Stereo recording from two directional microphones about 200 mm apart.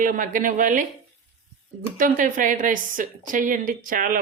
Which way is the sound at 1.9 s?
40° right (ahead or behind).